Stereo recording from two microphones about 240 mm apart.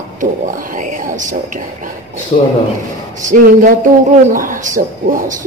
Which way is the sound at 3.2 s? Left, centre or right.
Right.